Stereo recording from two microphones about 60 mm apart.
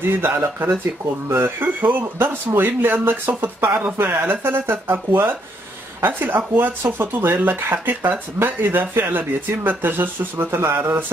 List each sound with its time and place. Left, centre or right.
0.0 s speech: right